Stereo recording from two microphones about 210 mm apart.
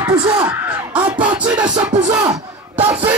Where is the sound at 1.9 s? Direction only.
35° right (ahead or behind).